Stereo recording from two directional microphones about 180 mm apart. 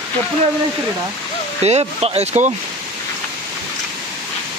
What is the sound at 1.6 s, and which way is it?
Speech, 35° right (ahead or behind).